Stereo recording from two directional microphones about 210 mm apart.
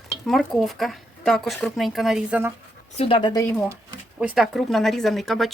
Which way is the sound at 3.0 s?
25° left (ahead or behind).